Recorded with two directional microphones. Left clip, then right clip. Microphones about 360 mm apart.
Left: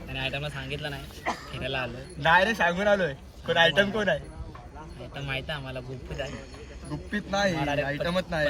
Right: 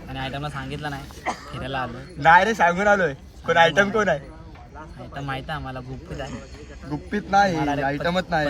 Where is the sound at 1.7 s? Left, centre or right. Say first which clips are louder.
Right 3 dB; centre.